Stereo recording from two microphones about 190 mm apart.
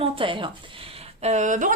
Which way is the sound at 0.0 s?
25° right (ahead or behind).